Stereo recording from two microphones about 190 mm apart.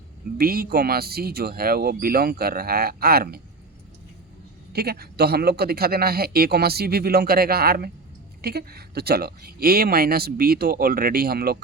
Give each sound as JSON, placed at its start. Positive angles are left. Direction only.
{"t": 0.3, "sound": "speech", "side_deg": -50}
{"t": 4.7, "sound": "speech", "side_deg": -55}